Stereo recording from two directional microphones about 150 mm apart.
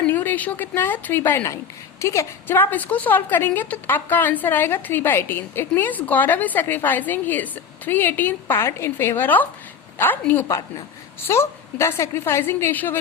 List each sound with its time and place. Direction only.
0.0 s a woman's voice: 10° left (ahead or behind)